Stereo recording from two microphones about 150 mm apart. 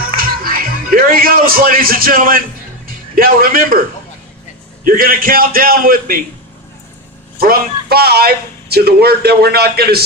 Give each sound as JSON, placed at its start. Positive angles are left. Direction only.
{"t": 0.0, "sound": "a man's voice", "side_deg": -75}
{"t": 4.8, "sound": "a man's voice", "side_deg": -70}
{"t": 7.3, "sound": "a man's voice", "side_deg": -80}